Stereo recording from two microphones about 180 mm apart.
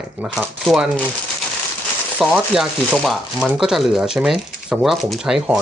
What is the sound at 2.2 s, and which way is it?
Speech, 5° right (ahead or behind).